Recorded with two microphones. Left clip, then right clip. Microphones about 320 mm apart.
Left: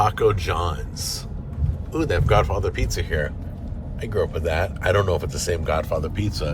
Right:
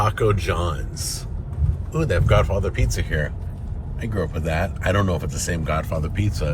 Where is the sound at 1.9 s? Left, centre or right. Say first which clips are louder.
Even; left.